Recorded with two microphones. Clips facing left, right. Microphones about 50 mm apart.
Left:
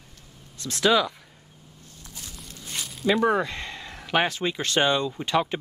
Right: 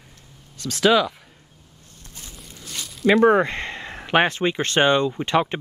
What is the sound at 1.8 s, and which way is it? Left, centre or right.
Boat, right.